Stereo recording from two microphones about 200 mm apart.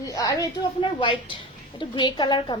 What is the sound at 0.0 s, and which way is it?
A woman's voice, 15° left (ahead or behind).